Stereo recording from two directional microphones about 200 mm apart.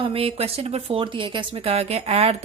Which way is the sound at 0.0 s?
25° right (ahead or behind).